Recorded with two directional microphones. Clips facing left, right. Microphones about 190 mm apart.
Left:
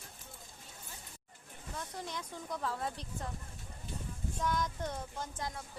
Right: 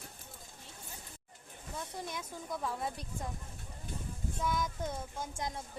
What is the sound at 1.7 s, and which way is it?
A woman's voice, 10° right (ahead or behind).